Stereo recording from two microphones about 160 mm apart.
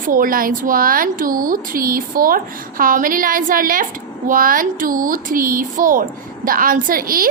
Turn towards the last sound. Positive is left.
turn(degrees=-65)  # may be behind; listen again after turning